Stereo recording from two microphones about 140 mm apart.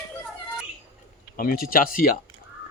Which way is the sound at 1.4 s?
90° left.